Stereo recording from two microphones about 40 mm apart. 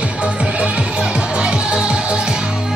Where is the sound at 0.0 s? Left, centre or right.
Right.